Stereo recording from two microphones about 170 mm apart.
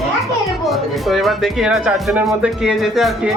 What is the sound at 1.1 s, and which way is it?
Speech, centre (ahead or behind).